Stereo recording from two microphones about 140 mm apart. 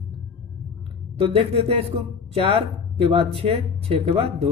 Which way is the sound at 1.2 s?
45° right (ahead or behind).